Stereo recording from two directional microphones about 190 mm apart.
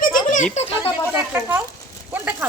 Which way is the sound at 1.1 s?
10° right (ahead or behind).